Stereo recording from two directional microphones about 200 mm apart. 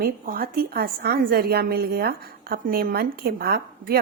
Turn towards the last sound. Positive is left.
turn(degrees=-50)  # may be behind; listen again after turning